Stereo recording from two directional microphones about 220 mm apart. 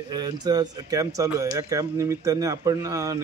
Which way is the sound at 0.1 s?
20° right (ahead or behind).